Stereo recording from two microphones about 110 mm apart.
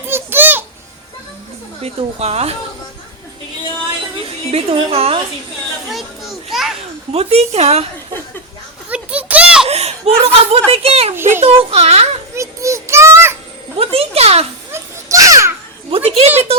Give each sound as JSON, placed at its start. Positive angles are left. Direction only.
{"t": 0.1, "sound": "babbling", "side_deg": -20}
{"t": 1.8, "sound": "a woman's voice", "side_deg": -70}
{"t": 4.5, "sound": "a woman's voice", "side_deg": -60}
{"t": 5.9, "sound": "children playing", "side_deg": 0}
{"t": 7.1, "sound": "a woman's voice", "side_deg": -65}
{"t": 8.9, "sound": "a sound", "side_deg": -10}
{"t": 9.6, "sound": "chuckle", "side_deg": -70}
{"t": 10.7, "sound": "a woman's voice", "side_deg": -65}
{"t": 12.4, "sound": "a sound", "side_deg": -25}
{"t": 13.7, "sound": "a child's voice", "side_deg": -65}
{"t": 14.7, "sound": "children playing", "side_deg": -30}
{"t": 15.9, "sound": "a woman's voice", "side_deg": -65}